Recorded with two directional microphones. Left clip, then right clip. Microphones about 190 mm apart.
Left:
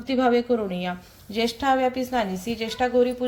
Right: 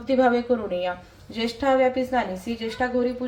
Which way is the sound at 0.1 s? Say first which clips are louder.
Right 1 dB; 30° left (ahead or behind).